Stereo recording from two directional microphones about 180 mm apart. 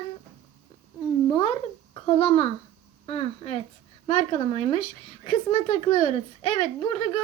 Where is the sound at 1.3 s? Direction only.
30° left (ahead or behind).